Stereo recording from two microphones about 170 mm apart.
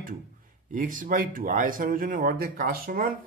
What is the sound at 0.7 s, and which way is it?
Speech, 50° right (ahead or behind).